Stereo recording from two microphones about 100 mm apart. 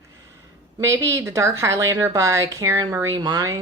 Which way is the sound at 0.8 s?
30° right (ahead or behind).